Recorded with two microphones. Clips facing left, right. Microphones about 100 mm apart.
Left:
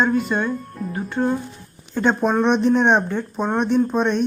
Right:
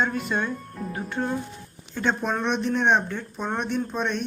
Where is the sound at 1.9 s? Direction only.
35° left (ahead or behind).